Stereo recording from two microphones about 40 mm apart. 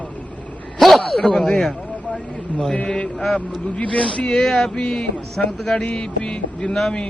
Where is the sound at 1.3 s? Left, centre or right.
Centre.